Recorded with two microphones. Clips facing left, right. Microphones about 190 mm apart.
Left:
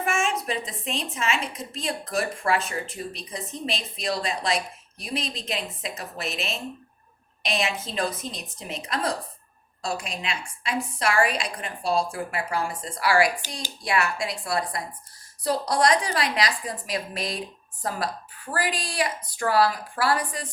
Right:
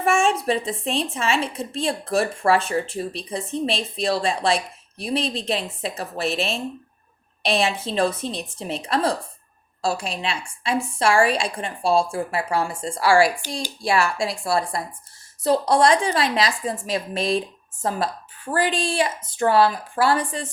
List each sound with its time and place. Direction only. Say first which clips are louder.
0.0 s a woman's voice: right 6 dB; 30° right (ahead or behind)